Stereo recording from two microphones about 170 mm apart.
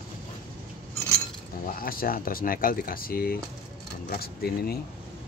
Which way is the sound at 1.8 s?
60° left (ahead or behind).